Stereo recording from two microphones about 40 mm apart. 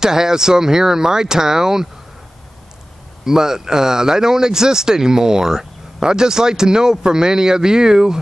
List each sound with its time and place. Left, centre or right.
0.0 s speech: centre
3.3 s speech: centre